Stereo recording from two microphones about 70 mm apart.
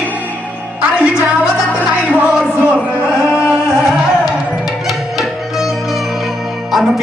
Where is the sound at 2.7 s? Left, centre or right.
Centre.